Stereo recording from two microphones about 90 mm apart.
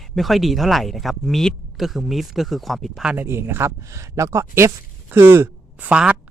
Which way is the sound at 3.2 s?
25° right (ahead or behind).